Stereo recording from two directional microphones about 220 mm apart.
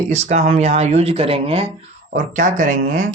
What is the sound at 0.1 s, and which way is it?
Speech, 30° right (ahead or behind).